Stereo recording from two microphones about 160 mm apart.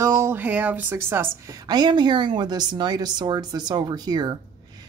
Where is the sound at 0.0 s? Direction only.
15° right (ahead or behind).